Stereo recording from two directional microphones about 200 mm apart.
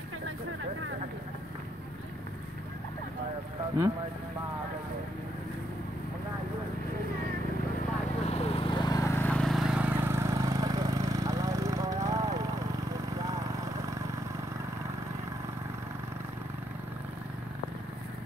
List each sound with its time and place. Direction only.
8.3 s vehicle: 30° left (ahead or behind); by 14.0 s 15° right (ahead or behind)